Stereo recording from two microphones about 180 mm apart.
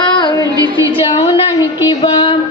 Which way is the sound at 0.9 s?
30° left (ahead or behind).